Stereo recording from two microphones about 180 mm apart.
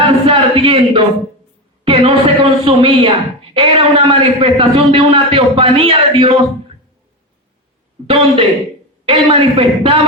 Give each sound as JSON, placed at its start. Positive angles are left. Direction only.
{"t": 0.3, "sound": "a sound", "side_deg": -30}
{"t": 1.8, "sound": "a man's voice", "side_deg": -30}
{"t": 8.0, "sound": "a man's voice", "side_deg": -30}